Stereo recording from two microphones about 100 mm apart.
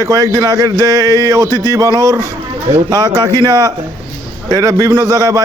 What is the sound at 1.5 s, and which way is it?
Speech, 35° left (ahead or behind).